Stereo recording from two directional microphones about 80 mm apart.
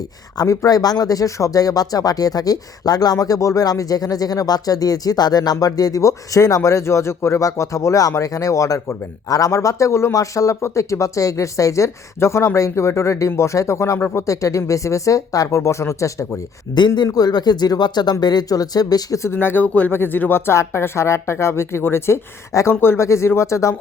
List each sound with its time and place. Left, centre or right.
0.4 s speech: left
16.7 s speech: left
17.1 s speech: left
19.2 s speech: left